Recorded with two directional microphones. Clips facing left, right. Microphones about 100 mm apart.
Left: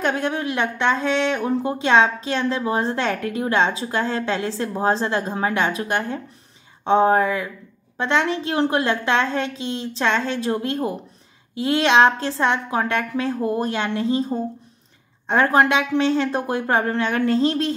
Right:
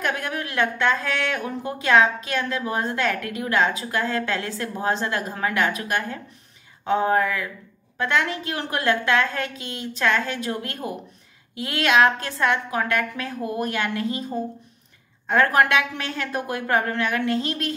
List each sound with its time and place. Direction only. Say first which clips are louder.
0.0 s a woman's voice: left 5 dB; 30° left (ahead or behind)